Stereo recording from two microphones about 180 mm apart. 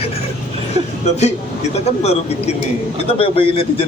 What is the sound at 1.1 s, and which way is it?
A man's voice, 40° left (ahead or behind).